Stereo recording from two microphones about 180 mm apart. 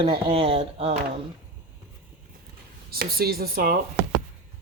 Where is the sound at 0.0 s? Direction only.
30° right (ahead or behind).